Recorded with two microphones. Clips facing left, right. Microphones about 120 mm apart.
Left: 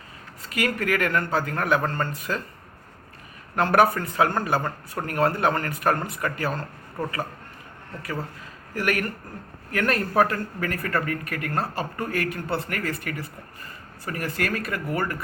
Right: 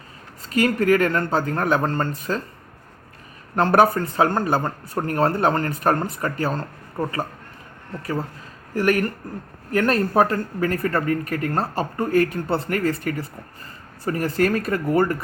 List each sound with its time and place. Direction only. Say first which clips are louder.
0.5 s speech: right 7 dB; 30° right (ahead or behind)
3.5 s speech: right 3 dB; 30° right (ahead or behind)
8.7 s speech: right 6 dB; 30° right (ahead or behind)